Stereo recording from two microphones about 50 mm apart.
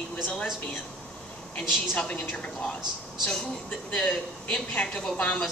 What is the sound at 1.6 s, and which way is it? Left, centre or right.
Speech, left.